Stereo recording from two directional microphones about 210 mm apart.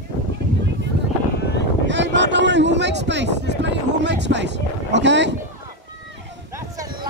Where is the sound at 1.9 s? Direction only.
60° right (ahead or behind).